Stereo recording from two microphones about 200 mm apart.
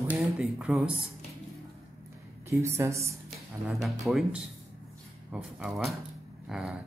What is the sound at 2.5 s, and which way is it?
Speech, 15° right (ahead or behind).